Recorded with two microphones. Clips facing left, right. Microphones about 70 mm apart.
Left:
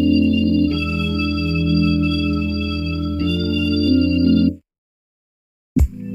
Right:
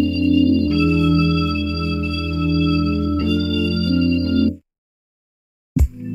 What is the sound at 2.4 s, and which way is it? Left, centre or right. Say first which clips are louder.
Music: right 5 dB; right.